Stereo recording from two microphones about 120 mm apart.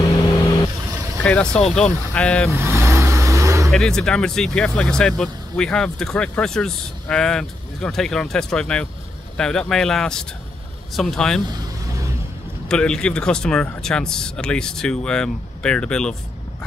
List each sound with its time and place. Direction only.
1.2 s speech: 10° left (ahead or behind)
2.5 s vehicle: 20° right (ahead or behind)
3.7 s speech: 5° left (ahead or behind)
12.6 s speech: 5° left (ahead or behind)